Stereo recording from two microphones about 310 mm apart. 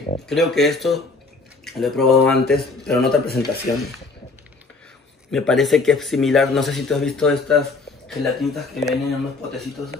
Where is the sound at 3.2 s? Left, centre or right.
Left.